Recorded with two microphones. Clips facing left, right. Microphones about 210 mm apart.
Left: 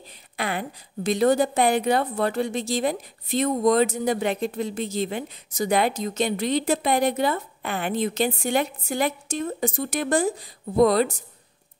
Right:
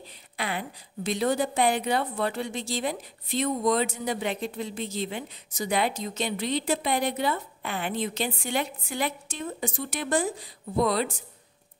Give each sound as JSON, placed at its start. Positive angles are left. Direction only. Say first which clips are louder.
{"t": 0.4, "sound": "a woman's voice", "louder": "left 4 dB", "side_deg": 50}